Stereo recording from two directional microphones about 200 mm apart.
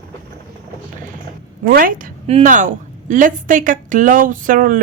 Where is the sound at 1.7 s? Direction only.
45° right (ahead or behind).